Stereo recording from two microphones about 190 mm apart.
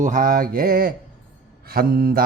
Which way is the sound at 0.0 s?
45° right (ahead or behind).